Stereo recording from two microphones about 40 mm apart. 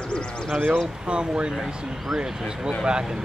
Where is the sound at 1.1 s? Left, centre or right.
Right.